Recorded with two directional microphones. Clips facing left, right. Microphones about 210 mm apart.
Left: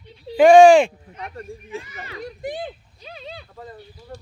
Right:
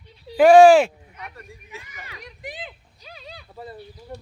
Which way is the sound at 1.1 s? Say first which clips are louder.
Left 7 dB; 30° left (ahead or behind).